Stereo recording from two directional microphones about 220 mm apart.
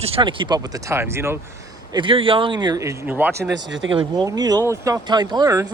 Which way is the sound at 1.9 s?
20° right (ahead or behind).